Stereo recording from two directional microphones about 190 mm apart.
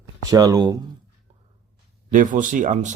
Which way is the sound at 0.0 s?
20° right (ahead or behind).